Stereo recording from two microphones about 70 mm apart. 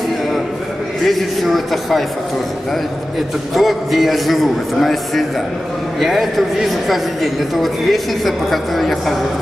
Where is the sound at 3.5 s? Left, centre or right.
Centre.